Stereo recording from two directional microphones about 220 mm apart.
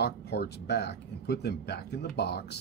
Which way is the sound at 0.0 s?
50° left (ahead or behind).